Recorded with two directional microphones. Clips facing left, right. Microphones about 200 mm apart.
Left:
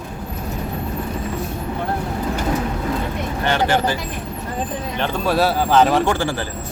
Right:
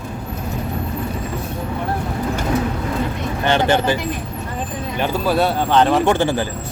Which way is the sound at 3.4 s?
20° right (ahead or behind).